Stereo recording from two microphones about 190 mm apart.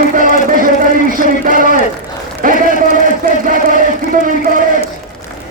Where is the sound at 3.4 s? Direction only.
45° right (ahead or behind).